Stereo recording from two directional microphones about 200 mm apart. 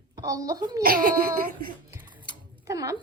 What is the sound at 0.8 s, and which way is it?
Speech, 45° right (ahead or behind).